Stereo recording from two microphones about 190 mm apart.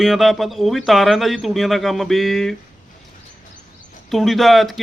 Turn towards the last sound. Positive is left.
turn(degrees=0)  # may be behind; listen again after turning